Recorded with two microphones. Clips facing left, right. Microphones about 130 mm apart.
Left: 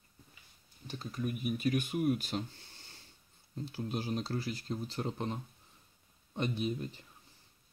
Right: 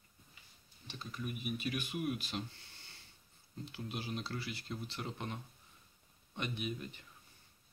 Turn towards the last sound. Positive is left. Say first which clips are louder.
# left 6 dB
turn(degrees=30)  # may be behind; listen again after turning